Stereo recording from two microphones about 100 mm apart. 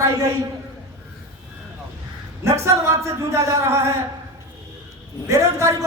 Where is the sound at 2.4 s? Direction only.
30° right (ahead or behind).